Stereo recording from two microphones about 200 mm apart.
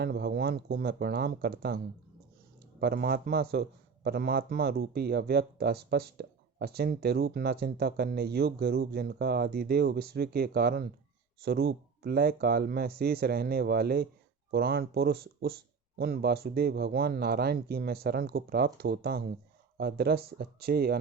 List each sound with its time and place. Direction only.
0.0 s a man's voice: 55° right (ahead or behind)
2.8 s a man's voice: 50° right (ahead or behind)